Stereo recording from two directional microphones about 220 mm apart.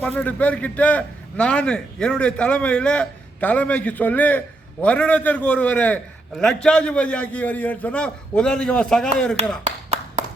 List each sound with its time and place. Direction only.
0.0 s a man's voice: 5° left (ahead or behind)
9.6 s clapping: 30° right (ahead or behind)